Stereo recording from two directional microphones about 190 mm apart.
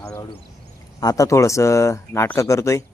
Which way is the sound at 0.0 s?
15° left (ahead or behind).